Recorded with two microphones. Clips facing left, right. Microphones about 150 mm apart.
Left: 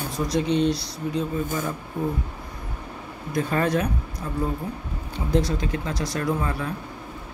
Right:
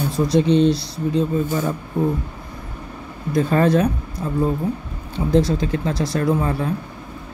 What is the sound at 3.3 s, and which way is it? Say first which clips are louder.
Speech: right 6 dB; 30° right (ahead or behind).